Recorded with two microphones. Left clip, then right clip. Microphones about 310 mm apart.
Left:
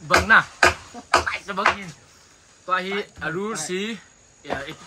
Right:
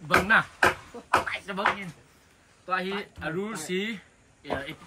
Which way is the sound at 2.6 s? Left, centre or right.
Centre.